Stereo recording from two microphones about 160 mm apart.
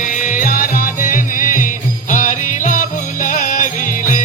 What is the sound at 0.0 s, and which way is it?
Music, 55° left (ahead or behind).